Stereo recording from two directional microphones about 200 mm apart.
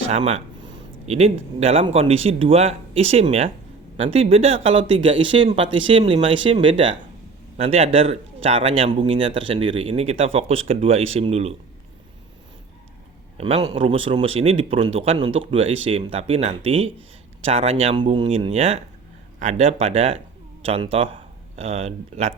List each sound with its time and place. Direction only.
0.1 s a man's voice: 30° right (ahead or behind)
13.3 s a man's voice: 30° right (ahead or behind)